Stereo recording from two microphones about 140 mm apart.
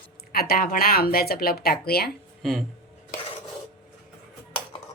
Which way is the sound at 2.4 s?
Centre (ahead or behind).